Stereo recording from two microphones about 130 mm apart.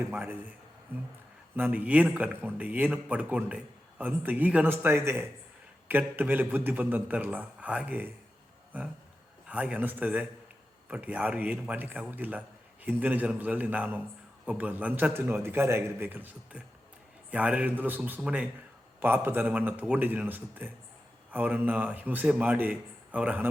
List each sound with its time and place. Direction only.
0.1 s speech: 15° right (ahead or behind)